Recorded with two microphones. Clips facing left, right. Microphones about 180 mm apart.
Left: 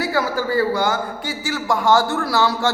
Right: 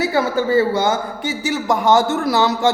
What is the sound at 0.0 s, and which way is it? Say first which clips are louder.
A man's voice: right 3 dB; 20° right (ahead or behind).